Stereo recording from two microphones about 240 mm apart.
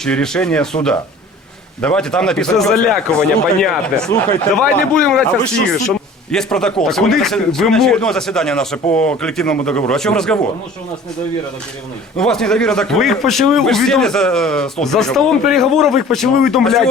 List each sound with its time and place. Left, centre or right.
0.0 s a man's voice: centre
4.1 s speech: left
4.5 s a man's voice: centre
6.3 s a man's voice: centre
12.1 s a man's voice: centre